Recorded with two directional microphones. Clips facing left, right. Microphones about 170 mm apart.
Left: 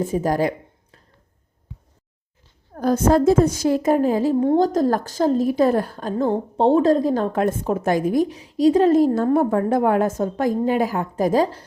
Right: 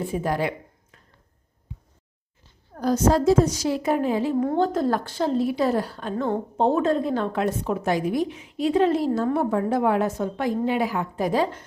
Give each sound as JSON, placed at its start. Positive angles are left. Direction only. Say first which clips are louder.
{"t": 0.0, "sound": "speech", "louder": "left 5 dB", "side_deg": 40}
{"t": 2.7, "sound": "a woman's voice", "louder": "left 3 dB", "side_deg": 50}